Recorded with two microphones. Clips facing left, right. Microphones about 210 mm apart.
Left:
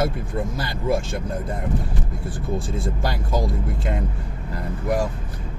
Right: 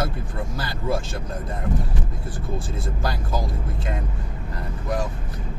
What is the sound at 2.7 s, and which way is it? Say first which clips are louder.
Speech: left 2 dB; 25° left (ahead or behind).